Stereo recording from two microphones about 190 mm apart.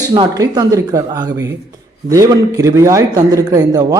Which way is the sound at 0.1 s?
20° right (ahead or behind).